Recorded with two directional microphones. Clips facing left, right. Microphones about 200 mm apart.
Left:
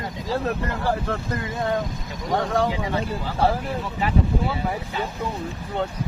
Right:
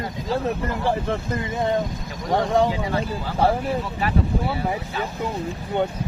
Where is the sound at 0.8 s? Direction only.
20° right (ahead or behind).